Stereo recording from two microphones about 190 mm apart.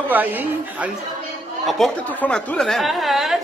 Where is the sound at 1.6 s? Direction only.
Centre (ahead or behind).